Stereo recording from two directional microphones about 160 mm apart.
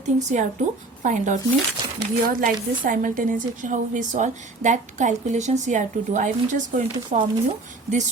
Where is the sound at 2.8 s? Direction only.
60° right (ahead or behind).